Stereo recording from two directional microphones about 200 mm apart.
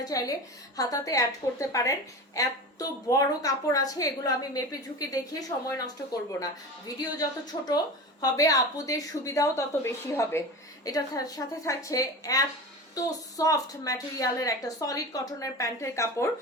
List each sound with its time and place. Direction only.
0.0 s a woman's voice: 20° left (ahead or behind)